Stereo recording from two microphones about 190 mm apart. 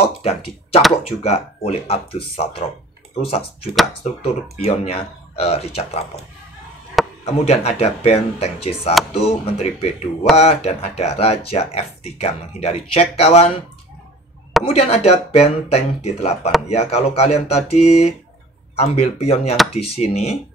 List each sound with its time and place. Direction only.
0.2 s speech: 30° left (ahead or behind)
7.2 s speech: 35° left (ahead or behind)
14.6 s speech: 30° left (ahead or behind)